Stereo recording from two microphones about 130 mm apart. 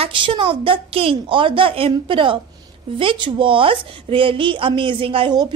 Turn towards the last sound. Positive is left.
turn(degrees=-35)  # may be behind; listen again after turning